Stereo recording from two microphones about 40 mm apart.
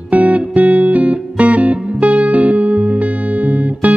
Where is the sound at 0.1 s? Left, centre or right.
Right.